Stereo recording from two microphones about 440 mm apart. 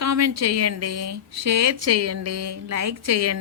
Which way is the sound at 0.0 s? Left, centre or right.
Right.